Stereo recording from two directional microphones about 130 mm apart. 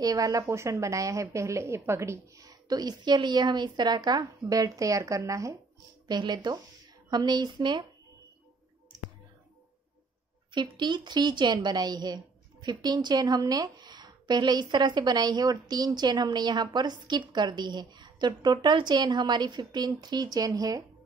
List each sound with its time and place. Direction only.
0.0 s a woman's voice: 30° right (ahead or behind)
10.5 s a woman's voice: 35° right (ahead or behind)